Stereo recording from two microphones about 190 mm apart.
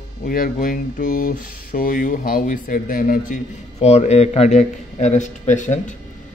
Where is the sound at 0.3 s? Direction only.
45° left (ahead or behind).